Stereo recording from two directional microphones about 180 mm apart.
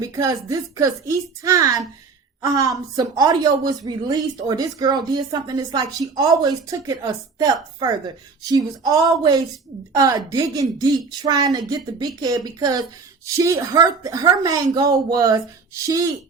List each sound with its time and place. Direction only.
0.0 s a woman's voice: 20° right (ahead or behind)